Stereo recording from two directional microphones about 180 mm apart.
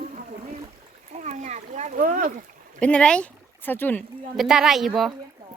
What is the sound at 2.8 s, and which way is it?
Speech, 5° left (ahead or behind).